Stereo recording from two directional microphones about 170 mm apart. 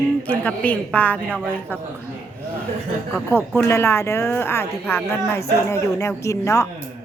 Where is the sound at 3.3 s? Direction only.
10° left (ahead or behind).